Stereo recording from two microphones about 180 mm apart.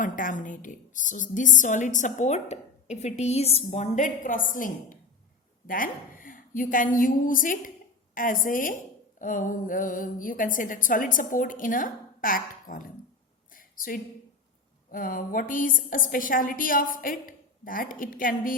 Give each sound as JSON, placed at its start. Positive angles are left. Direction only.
{"t": 0.0, "sound": "a woman's voice", "side_deg": 45}
{"t": 13.5, "sound": "a sound", "side_deg": 50}
{"t": 14.8, "sound": "a woman's voice", "side_deg": 50}